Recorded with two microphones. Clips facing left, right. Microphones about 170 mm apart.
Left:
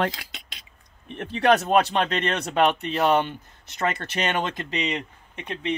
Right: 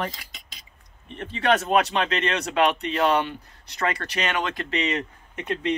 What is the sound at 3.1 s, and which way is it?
Speech, 25° left (ahead or behind).